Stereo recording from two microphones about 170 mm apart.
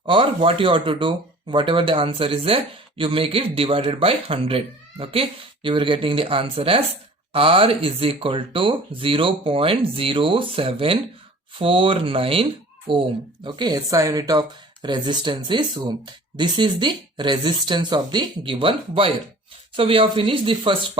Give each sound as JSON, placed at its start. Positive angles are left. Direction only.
{"t": 0.0, "sound": "speech", "side_deg": -30}